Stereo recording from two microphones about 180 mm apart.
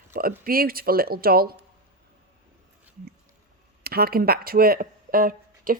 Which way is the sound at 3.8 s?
55° right (ahead or behind).